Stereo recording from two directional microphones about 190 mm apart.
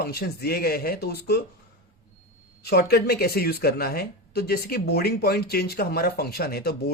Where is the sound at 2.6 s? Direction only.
55° left (ahead or behind).